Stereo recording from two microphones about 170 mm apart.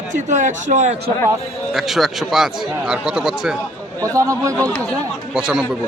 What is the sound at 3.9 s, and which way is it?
Speech, 20° right (ahead or behind).